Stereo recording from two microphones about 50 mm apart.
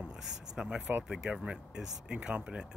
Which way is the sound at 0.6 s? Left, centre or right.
Centre.